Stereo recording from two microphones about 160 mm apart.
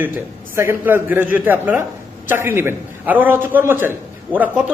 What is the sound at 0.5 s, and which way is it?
A man's voice, 15° right (ahead or behind).